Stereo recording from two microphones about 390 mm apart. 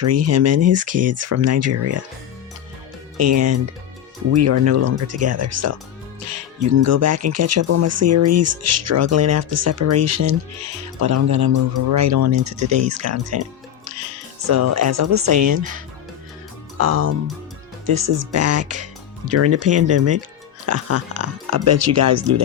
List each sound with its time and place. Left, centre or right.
0.0 s speech: right
3.2 s speech: right
6.8 s speech: right
16.7 s speech: right